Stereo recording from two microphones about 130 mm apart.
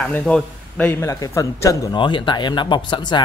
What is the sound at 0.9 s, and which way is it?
Speech, 20° left (ahead or behind).